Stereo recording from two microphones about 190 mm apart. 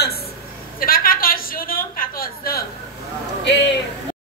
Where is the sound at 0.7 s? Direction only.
50° left (ahead or behind).